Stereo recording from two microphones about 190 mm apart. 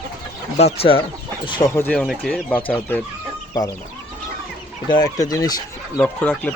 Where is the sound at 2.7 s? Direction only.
10° left (ahead or behind).